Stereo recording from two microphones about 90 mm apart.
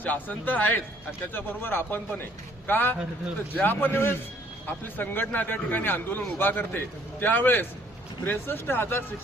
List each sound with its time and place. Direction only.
0.0 s a man's voice: 20° left (ahead or behind)